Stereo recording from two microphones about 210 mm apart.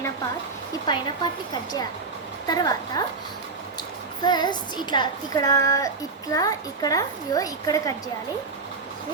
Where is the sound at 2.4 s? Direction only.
20° left (ahead or behind).